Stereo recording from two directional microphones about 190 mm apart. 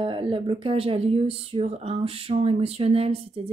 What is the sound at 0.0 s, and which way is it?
Speech, 30° right (ahead or behind).